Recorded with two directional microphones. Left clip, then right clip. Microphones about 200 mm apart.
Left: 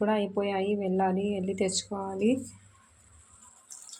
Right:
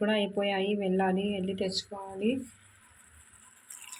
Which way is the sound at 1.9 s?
30° left (ahead or behind).